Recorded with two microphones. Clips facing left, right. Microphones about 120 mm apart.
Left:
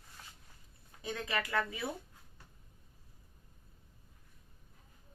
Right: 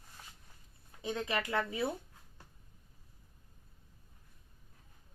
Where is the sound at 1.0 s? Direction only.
25° right (ahead or behind).